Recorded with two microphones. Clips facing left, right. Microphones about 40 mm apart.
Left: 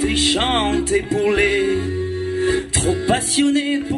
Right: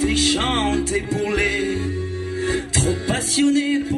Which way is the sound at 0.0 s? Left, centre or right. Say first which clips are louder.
Left 1 dB; left.